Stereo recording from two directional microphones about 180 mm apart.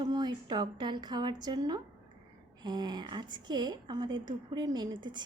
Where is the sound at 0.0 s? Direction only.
25° right (ahead or behind).